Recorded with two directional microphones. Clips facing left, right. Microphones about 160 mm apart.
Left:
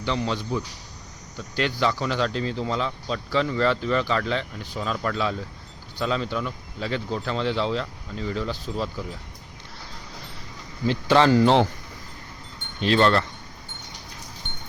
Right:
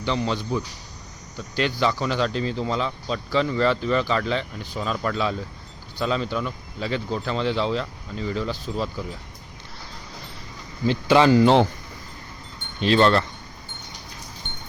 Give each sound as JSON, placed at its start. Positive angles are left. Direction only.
{"t": 0.0, "sound": "speech", "side_deg": -20}
{"t": 10.8, "sound": "speech", "side_deg": -10}
{"t": 12.8, "sound": "speech", "side_deg": -20}